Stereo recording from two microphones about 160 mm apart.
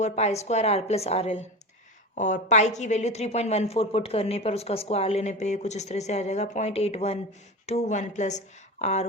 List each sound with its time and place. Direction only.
0.0 s a woman's voice: 45° left (ahead or behind)